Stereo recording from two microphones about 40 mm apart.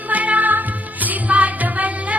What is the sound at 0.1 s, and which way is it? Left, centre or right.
Music, right.